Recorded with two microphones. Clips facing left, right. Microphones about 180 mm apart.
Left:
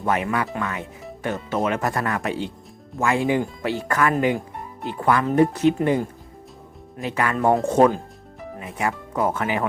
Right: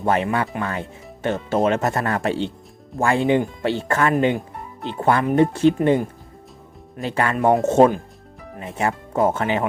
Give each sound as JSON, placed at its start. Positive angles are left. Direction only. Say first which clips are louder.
{"t": 0.0, "sound": "speech", "louder": "right 3 dB", "side_deg": -25}
{"t": 7.1, "sound": "speech", "louder": "right 2 dB", "side_deg": -30}